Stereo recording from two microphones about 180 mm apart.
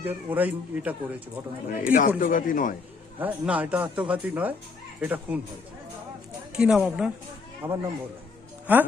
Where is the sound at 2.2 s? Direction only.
50° left (ahead or behind).